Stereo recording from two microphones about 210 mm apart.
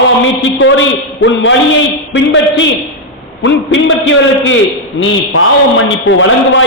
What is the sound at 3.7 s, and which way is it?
A man's voice, 60° left (ahead or behind).